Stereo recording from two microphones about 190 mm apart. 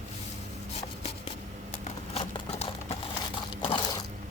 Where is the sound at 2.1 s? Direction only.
35° left (ahead or behind).